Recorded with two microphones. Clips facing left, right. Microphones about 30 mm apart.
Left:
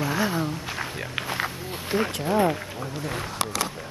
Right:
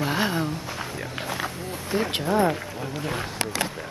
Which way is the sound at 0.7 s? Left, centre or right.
Left.